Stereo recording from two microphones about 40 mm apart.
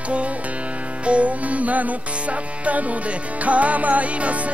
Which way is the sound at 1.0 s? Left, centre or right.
Right.